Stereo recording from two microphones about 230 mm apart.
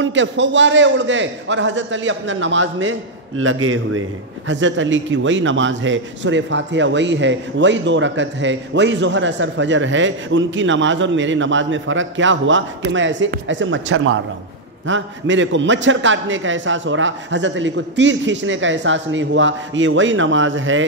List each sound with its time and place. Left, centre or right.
0.0 s a man's voice: right